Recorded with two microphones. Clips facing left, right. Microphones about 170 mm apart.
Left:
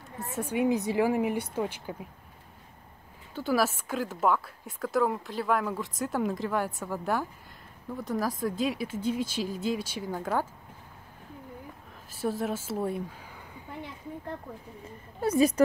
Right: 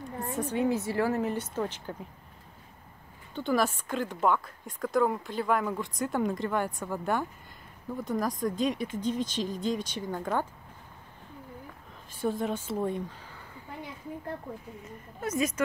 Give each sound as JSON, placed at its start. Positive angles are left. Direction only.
{"t": 0.0, "sound": "a woman's voice", "side_deg": 10}
{"t": 3.3, "sound": "a woman's voice", "side_deg": 5}
{"t": 12.1, "sound": "a woman's voice", "side_deg": 5}
{"t": 14.9, "sound": "a woman's voice", "side_deg": 35}